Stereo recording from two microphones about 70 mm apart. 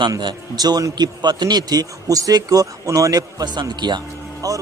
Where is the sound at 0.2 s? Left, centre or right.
Right.